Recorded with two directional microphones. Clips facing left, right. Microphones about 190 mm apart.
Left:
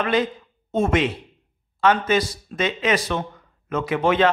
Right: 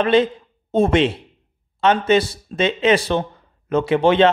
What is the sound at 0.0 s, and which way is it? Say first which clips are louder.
A man's voice: right 6 dB; 30° right (ahead or behind).